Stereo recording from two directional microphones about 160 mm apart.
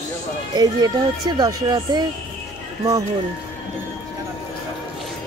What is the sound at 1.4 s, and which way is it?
Speech, 25° right (ahead or behind).